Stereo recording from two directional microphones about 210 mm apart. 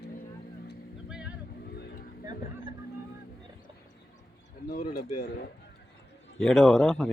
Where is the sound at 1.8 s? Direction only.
45° left (ahead or behind).